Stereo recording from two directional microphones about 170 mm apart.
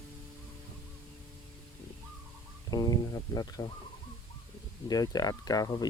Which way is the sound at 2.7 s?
25° left (ahead or behind).